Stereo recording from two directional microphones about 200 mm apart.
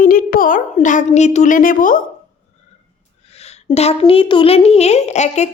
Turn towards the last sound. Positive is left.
turn(degrees=35)  # may be behind; listen again after turning